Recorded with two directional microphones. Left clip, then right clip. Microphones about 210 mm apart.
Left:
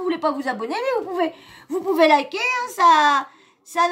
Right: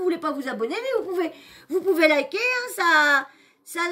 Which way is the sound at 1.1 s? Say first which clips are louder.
Left 4 dB; 50° right (ahead or behind).